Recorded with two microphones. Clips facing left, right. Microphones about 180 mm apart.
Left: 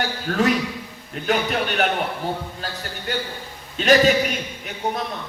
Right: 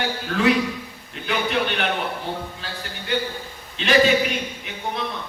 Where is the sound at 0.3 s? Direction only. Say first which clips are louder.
Right 1 dB; 45° left (ahead or behind).